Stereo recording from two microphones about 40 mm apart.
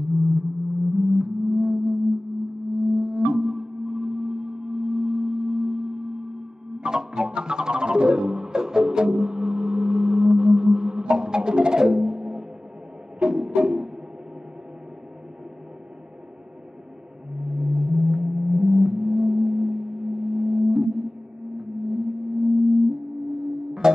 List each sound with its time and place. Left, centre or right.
0.0 s music: centre
2.8 s singing bowl: right
3.3 s a sound: centre
6.8 s music: centre
17.3 s gong: centre
21.5 s sonar: centre
22.5 s music: centre
23.3 s music: centre